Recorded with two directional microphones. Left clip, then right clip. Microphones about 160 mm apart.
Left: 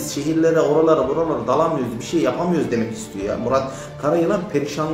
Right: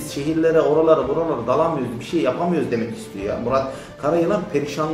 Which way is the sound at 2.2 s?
5° left (ahead or behind).